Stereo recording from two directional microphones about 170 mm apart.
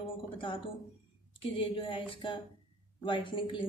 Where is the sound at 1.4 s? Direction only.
30° left (ahead or behind).